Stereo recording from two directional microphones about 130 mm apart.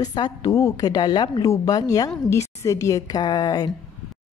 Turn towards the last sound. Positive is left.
turn(degrees=30)  # may be behind; listen again after turning